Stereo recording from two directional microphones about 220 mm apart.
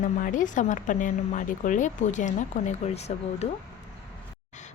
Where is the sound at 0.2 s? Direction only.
35° left (ahead or behind).